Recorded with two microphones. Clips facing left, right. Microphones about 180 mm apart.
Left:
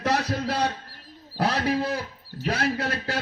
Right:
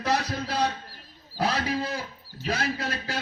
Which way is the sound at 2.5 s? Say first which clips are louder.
Left 3 dB; 65° left (ahead or behind).